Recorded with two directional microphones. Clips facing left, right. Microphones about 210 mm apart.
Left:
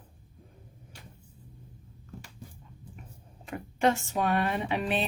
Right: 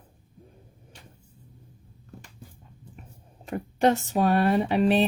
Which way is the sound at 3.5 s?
40° right (ahead or behind).